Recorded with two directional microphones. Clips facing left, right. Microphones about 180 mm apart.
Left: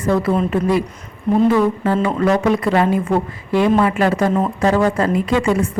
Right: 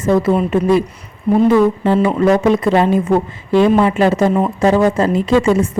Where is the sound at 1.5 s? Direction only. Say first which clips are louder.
Right 3 dB; 25° right (ahead or behind).